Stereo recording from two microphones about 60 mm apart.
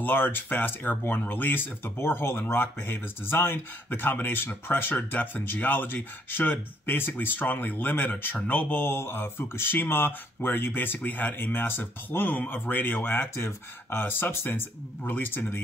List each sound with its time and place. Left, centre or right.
0.0 s speech: left